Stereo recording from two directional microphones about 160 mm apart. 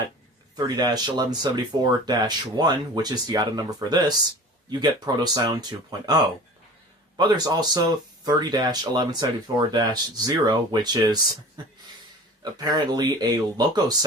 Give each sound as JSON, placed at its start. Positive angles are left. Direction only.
{"t": 0.5, "sound": "speech", "side_deg": -25}
{"t": 7.2, "sound": "speech", "side_deg": -25}